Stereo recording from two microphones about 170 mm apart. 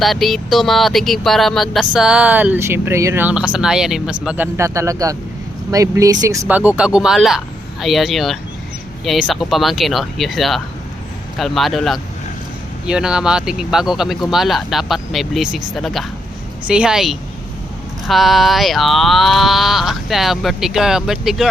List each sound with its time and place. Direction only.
0.0 s speech: centre (ahead or behind)
4.5 s speech: 15° right (ahead or behind)
6.5 s speech: 10° right (ahead or behind)